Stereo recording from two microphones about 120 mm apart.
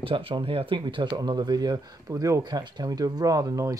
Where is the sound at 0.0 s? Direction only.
50° right (ahead or behind); by 2.4 s 25° right (ahead or behind).